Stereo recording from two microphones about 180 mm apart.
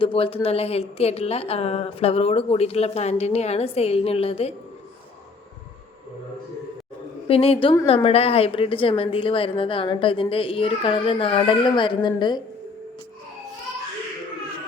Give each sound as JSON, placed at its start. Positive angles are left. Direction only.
{"t": 0.0, "sound": "a woman's voice", "side_deg": 30}
{"t": 7.3, "sound": "a woman's voice", "side_deg": 30}